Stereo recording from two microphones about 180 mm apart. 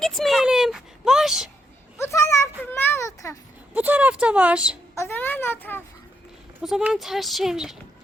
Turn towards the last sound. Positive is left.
turn(degrees=0)  # may be behind; listen again after turning